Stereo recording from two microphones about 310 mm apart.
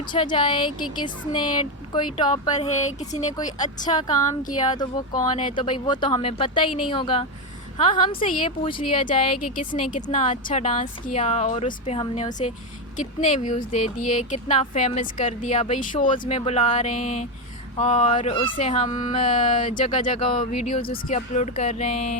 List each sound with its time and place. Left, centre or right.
0.1 s speech: centre